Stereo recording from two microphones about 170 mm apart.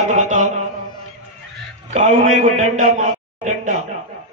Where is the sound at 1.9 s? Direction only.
40° right (ahead or behind).